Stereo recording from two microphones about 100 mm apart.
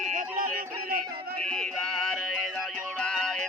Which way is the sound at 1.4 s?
10° left (ahead or behind).